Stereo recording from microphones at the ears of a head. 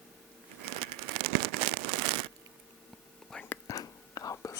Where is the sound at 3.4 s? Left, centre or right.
Left.